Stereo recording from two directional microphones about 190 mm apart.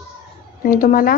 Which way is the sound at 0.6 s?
50° left (ahead or behind).